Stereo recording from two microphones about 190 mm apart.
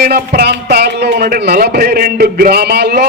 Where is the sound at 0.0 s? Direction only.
50° right (ahead or behind).